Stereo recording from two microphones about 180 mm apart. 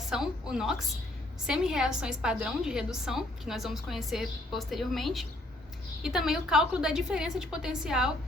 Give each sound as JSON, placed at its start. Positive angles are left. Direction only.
{"t": 0.1, "sound": "a woman's voice", "side_deg": 0}